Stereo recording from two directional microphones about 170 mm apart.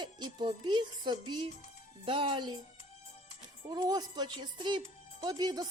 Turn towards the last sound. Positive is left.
turn(degrees=-25)  # may be behind; listen again after turning